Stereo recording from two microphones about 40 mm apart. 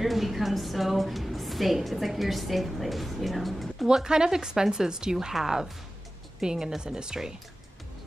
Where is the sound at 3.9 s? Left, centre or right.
Centre.